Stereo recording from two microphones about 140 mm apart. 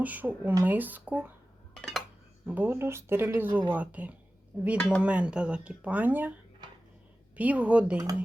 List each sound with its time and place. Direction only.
0.0 s speech: 10° right (ahead or behind)
1.7 s dishes: centre (ahead or behind)
2.5 s speech: 15° right (ahead or behind)
4.8 s speech: 10° left (ahead or behind)
5.0 s speech: 10° right (ahead or behind)
7.3 s speech: 10° right (ahead or behind)